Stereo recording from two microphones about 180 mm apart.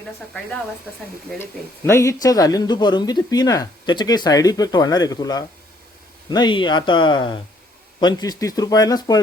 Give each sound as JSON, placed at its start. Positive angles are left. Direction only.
{"t": 1.4, "sound": "speech", "side_deg": 15}